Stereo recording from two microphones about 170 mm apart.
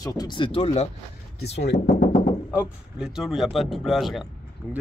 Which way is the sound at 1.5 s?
75° left (ahead or behind).